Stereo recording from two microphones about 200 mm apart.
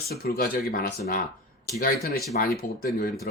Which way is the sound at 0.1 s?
50° left (ahead or behind).